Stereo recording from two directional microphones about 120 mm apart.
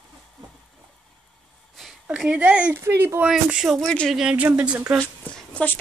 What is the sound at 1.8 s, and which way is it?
Speech, 5° right (ahead or behind).